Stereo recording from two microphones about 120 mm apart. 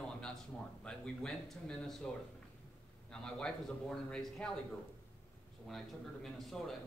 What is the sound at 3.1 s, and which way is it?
A man's voice, 5° left (ahead or behind).